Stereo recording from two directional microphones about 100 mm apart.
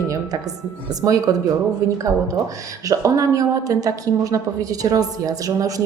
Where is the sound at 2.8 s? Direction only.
35° right (ahead or behind).